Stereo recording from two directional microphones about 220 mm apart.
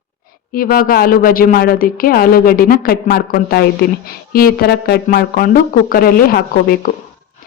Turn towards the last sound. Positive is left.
turn(degrees=40)  # may be behind; listen again after turning